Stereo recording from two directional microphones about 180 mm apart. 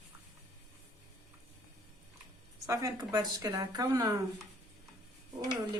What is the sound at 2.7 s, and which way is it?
A woman's voice, 20° right (ahead or behind).